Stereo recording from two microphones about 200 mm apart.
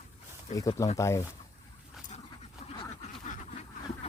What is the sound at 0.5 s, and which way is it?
Speech, 15° left (ahead or behind).